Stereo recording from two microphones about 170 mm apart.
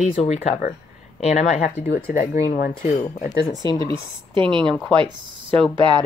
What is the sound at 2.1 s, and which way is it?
Speech, 55° left (ahead or behind).